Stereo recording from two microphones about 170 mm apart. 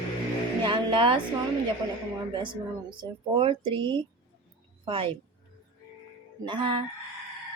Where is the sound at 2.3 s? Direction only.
30° right (ahead or behind).